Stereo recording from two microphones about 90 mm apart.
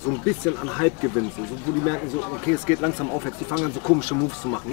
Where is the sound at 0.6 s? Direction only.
25° left (ahead or behind).